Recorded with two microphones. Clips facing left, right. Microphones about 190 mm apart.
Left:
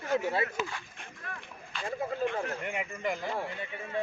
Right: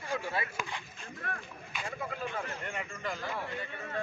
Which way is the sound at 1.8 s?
30° left (ahead or behind).